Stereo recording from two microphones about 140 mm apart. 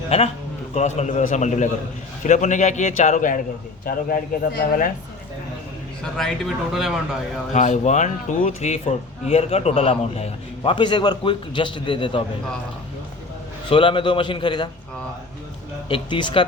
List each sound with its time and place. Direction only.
0.1 s a man's voice: 45° left (ahead or behind); by 3.4 s 70° left (ahead or behind)
3.8 s speech: 90° left
6.1 s speech: centre (ahead or behind)
7.5 s speech: 55° left (ahead or behind); by 12.2 s 35° left (ahead or behind)
13.7 s a man's voice: 35° left (ahead or behind)
15.9 s a man's voice: 35° left (ahead or behind)